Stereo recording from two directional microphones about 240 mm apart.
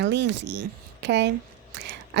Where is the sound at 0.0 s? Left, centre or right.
Right.